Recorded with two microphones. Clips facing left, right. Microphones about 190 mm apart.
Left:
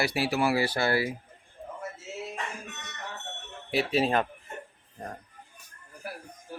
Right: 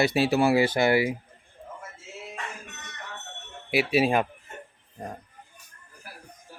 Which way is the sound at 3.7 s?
10° right (ahead or behind).